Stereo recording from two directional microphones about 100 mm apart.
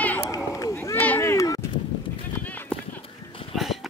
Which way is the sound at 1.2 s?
35° left (ahead or behind).